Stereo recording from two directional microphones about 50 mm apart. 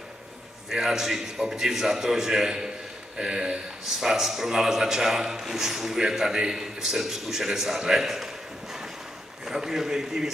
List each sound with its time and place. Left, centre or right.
0.7 s a man's voice: centre
4.0 s a man's voice: centre
9.4 s a man's voice: centre